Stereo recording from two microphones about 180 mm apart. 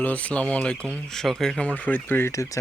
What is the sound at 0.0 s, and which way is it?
Speech, 10° left (ahead or behind).